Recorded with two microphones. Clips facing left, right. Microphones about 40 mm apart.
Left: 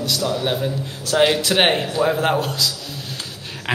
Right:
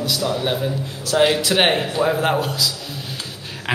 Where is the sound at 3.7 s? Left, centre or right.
Centre.